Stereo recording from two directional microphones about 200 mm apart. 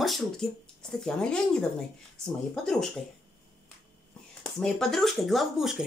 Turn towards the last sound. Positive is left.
turn(degrees=0)  # may be behind; listen again after turning